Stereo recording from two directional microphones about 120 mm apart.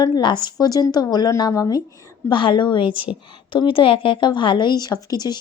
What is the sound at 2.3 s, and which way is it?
A woman's voice, 40° left (ahead or behind).